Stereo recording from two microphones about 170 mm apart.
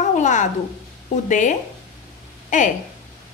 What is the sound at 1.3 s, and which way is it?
A woman's voice, 45° left (ahead or behind).